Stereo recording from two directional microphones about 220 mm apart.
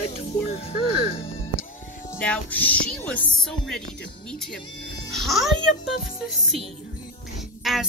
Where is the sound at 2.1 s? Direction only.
5° left (ahead or behind).